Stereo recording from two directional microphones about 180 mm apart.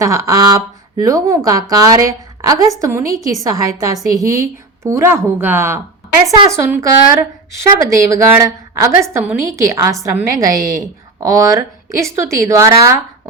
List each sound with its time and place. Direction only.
0.0 s a woman's voice: 20° right (ahead or behind)